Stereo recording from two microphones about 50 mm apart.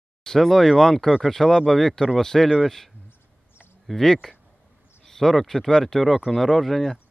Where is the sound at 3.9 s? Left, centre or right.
Centre.